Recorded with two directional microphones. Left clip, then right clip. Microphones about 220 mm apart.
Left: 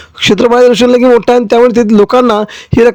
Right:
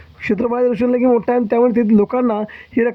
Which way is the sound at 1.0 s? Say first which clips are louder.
Left 9 dB; 40° left (ahead or behind).